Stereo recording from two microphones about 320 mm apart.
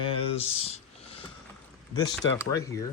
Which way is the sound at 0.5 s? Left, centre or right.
Centre.